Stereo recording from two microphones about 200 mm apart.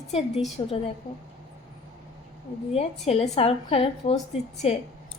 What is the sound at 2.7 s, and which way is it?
A woman's voice, 30° left (ahead or behind).